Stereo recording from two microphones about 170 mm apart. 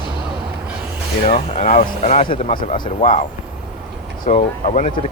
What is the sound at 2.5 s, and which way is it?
Speech, 55° left (ahead or behind).